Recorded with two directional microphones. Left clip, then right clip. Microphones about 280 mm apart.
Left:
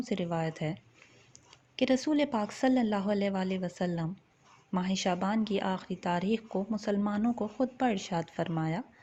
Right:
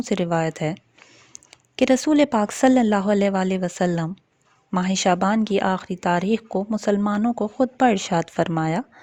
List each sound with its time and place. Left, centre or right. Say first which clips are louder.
0.0 s speech: right 11 dB; right